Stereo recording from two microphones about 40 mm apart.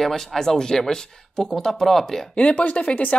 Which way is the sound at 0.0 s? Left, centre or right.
Centre.